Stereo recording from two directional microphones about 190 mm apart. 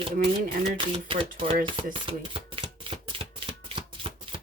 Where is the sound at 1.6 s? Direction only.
25° right (ahead or behind).